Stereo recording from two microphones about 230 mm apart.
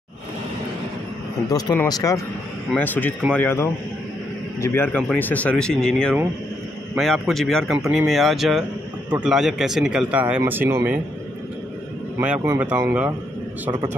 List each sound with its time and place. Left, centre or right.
1.5 s speech: centre
12.2 s speech: centre